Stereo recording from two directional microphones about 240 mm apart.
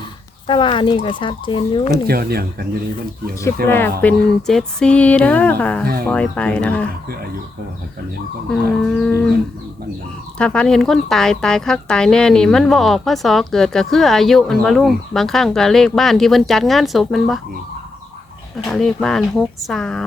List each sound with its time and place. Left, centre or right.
0.4 s speech: left
2.0 s speech: right
3.7 s speech: centre
5.8 s speech: right
6.1 s speech: centre
8.4 s speech: centre
10.3 s speech: centre
18.7 s speech: centre